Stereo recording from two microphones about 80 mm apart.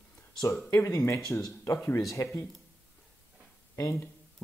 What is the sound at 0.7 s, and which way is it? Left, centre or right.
Speech, left.